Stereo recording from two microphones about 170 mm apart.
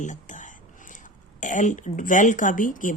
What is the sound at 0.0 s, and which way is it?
Speech, 45° left (ahead or behind).